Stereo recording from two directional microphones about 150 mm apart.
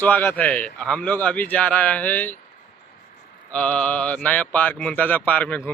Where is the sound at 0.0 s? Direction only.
10° left (ahead or behind).